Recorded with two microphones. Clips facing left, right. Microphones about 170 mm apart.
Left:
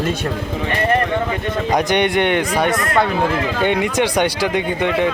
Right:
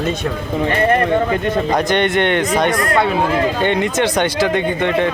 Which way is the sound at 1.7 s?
15° left (ahead or behind).